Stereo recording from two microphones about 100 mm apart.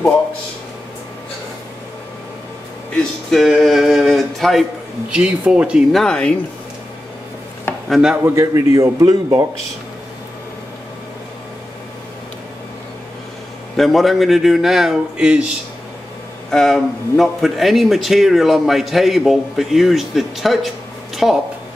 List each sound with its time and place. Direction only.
3.3 s speech: centre (ahead or behind)
5.1 s speech: 10° right (ahead or behind)
5.9 s speech: 5° left (ahead or behind)
7.9 s speech: 5° right (ahead or behind)
8.2 s a man's voice: 30° right (ahead or behind)
13.7 s speech: centre (ahead or behind)
16.4 s speech: 5° left (ahead or behind)